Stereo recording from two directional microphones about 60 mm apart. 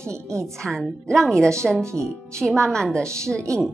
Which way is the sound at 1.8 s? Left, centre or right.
Right.